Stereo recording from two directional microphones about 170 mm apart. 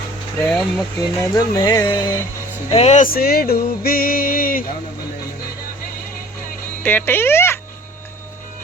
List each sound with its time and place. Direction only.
0.3 s speech: 5° left (ahead or behind)
1.2 s music: 20° left (ahead or behind)
2.6 s speech: 35° left (ahead or behind)
3.0 s a sound: 60° left (ahead or behind)
6.8 s speech: 10° left (ahead or behind)